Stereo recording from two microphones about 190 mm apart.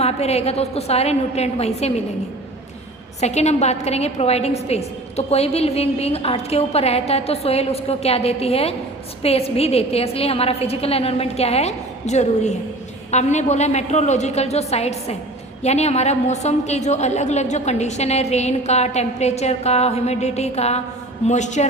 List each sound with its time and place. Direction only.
0.0 s a woman's voice: 35° left (ahead or behind)
3.2 s a woman's voice: 35° left (ahead or behind)